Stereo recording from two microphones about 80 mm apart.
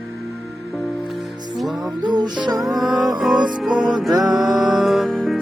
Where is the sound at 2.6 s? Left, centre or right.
Centre.